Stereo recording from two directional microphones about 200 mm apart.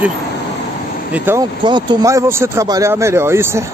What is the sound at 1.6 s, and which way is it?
Speech, 20° right (ahead or behind).